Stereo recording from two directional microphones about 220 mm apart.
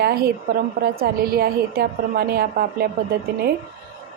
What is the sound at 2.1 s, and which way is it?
Speech, 45° right (ahead or behind).